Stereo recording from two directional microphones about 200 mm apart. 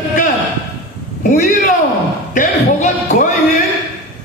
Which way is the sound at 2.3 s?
35° left (ahead or behind).